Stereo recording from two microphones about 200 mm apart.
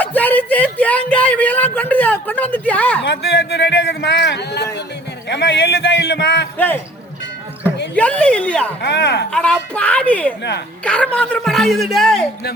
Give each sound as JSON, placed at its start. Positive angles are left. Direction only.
{"t": 0.0, "sound": "speech", "side_deg": 10}
{"t": 3.0, "sound": "a man's voice", "side_deg": 60}
{"t": 7.9, "sound": "speech", "side_deg": 5}
{"t": 8.8, "sound": "a man's voice", "side_deg": 60}
{"t": 9.3, "sound": "speech", "side_deg": 5}